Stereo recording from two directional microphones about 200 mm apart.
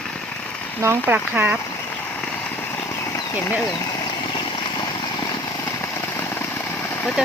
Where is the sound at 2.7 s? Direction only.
15° left (ahead or behind).